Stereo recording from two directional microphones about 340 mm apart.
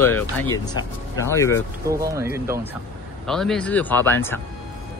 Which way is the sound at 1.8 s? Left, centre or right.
Centre.